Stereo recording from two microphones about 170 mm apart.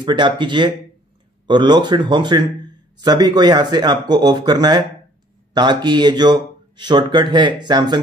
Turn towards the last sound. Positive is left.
turn(degrees=-25)  # may be behind; listen again after turning